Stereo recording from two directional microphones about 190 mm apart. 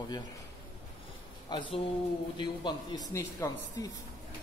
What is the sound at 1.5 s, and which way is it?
Speech, 25° left (ahead or behind).